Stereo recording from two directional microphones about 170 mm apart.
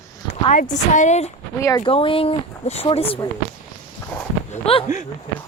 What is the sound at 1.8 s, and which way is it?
Speech, 30° left (ahead or behind).